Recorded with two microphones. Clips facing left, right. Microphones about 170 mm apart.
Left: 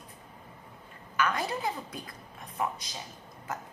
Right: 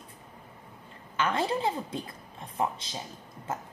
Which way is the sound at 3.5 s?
25° right (ahead or behind).